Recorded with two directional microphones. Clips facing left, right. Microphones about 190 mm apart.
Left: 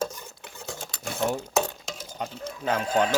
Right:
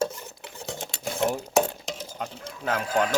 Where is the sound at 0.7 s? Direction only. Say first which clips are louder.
Right 3 dB; 20° right (ahead or behind).